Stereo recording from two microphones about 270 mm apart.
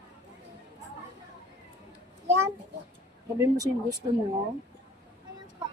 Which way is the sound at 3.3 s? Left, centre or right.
Centre.